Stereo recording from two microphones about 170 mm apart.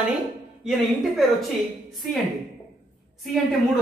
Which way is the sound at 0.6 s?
Centre (ahead or behind).